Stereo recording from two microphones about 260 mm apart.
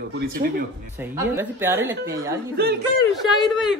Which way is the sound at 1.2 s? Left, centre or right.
Centre.